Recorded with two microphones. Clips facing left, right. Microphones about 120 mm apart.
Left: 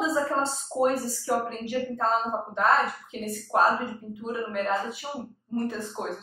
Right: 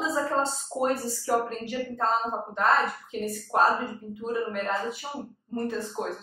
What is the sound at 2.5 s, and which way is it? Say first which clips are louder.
Speech: left 1 dB; centre (ahead or behind).